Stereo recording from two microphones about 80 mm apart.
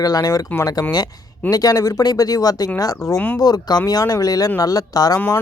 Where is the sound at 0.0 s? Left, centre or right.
Left.